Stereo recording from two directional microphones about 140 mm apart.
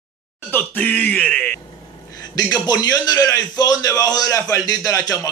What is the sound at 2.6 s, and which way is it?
A man's voice, 30° left (ahead or behind).